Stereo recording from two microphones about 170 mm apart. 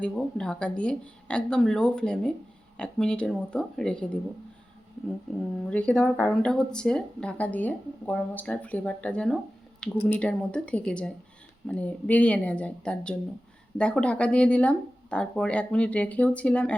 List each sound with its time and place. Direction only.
0.0 s speech: 5° left (ahead or behind)
5.7 s speech: 10° left (ahead or behind)